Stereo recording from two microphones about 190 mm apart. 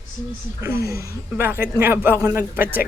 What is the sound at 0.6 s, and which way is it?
A woman's voice, 15° right (ahead or behind).